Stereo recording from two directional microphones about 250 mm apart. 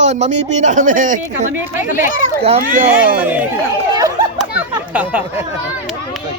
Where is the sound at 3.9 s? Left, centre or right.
Centre.